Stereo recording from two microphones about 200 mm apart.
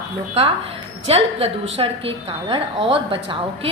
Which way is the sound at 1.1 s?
30° right (ahead or behind).